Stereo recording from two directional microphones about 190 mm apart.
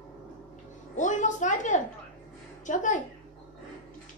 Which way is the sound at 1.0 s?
40° left (ahead or behind).